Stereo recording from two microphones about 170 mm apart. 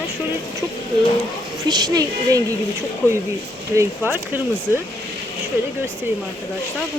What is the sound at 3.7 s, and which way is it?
Speech, 15° right (ahead or behind).